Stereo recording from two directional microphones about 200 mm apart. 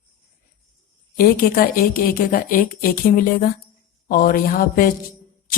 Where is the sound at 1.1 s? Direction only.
50° left (ahead or behind).